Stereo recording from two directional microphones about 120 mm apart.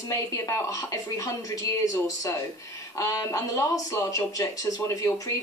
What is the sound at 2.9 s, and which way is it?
Speech, 30° left (ahead or behind).